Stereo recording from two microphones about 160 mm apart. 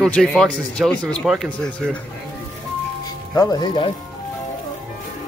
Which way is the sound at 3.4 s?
25° left (ahead or behind).